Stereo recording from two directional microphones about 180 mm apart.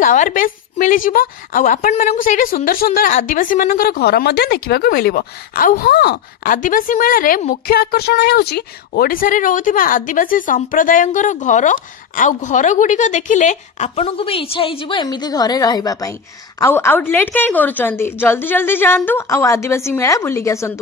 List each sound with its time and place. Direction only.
0.0 s a woman's voice: 45° left (ahead or behind); by 20.8 s 15° left (ahead or behind)